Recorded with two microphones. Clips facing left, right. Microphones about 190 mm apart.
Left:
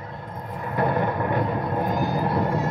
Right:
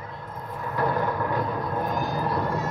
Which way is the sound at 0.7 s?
55° left (ahead or behind).